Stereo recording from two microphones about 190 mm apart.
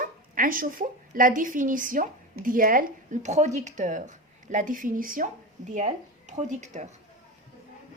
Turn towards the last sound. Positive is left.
turn(degrees=-40)  # may be behind; listen again after turning